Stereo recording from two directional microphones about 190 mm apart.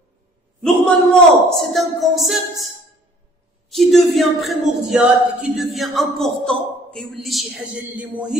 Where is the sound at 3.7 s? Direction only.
Centre (ahead or behind).